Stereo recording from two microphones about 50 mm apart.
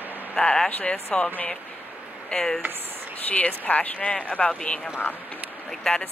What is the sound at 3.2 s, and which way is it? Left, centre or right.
Speech, left.